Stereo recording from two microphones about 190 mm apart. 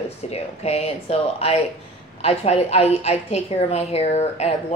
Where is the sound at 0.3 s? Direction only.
35° left (ahead or behind).